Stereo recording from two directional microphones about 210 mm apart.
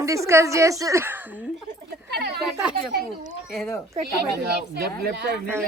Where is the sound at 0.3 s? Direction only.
15° right (ahead or behind).